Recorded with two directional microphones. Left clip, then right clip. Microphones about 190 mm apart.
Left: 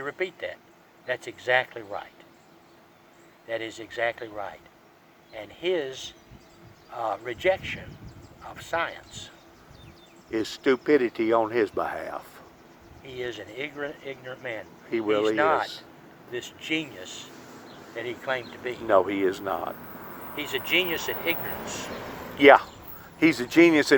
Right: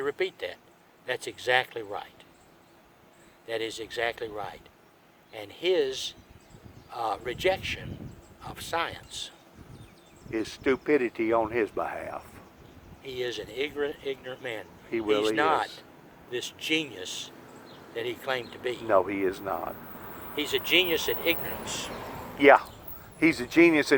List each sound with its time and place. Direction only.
0.0 s speech: 55° right (ahead or behind)
3.4 s speech: 55° right (ahead or behind)
10.3 s speech: 35° left (ahead or behind)
13.1 s speech: 55° right (ahead or behind)
14.9 s speech: 40° left (ahead or behind)
15.4 s speech: 50° right (ahead or behind)
18.9 s speech: 35° left (ahead or behind)
20.3 s speech: 55° right (ahead or behind)
22.4 s speech: 30° left (ahead or behind)